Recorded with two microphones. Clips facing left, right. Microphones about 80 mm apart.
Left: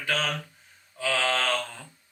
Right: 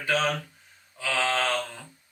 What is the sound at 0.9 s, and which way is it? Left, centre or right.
Speech, centre.